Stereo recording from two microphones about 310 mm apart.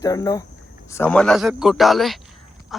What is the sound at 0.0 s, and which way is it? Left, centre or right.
A man's voice, centre.